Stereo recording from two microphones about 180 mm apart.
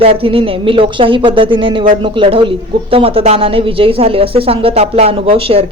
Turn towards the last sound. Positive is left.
turn(degrees=-30)  # may be behind; listen again after turning